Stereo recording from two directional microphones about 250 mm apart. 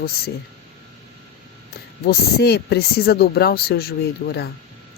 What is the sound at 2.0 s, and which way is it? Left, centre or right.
Speech, left.